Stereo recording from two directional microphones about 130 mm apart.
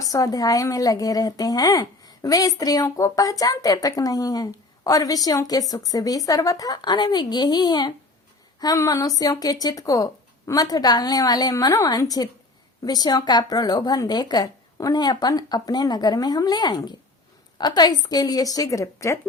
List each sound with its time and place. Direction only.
0.0 s a woman's voice: 25° left (ahead or behind)